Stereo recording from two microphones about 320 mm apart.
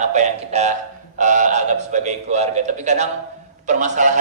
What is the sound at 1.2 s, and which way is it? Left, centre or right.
A man's voice, right.